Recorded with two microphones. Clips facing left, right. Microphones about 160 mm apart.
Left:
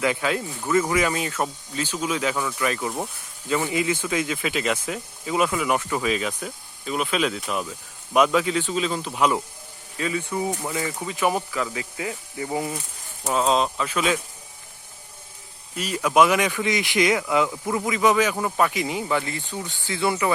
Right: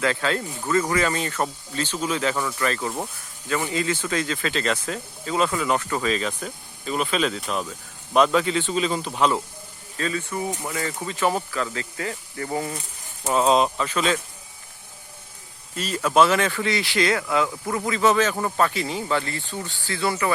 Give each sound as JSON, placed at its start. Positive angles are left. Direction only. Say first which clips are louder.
{"t": 0.0, "sound": "speech", "louder": "even", "side_deg": 15}
{"t": 13.2, "sound": "speech", "louder": "right 2 dB", "side_deg": -5}
{"t": 13.8, "sound": "speech", "louder": "even", "side_deg": 10}
{"t": 15.7, "sound": "speech", "louder": "even", "side_deg": 10}